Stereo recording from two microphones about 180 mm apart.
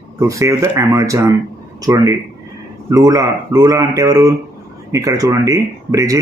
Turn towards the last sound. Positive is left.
turn(degrees=-15)  # may be behind; listen again after turning